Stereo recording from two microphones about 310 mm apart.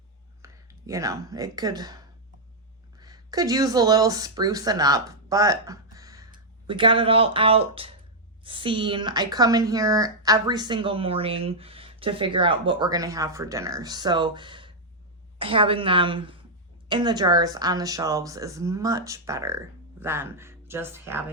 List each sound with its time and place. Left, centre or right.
0.4 s speech: centre
3.0 s speech: centre